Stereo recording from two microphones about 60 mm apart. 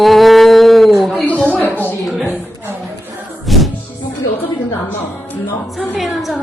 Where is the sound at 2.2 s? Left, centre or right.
Right.